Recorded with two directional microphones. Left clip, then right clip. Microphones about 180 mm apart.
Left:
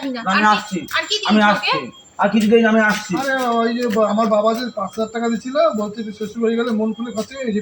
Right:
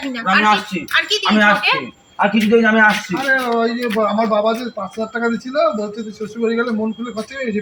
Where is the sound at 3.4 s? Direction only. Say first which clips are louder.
Even; 15° right (ahead or behind).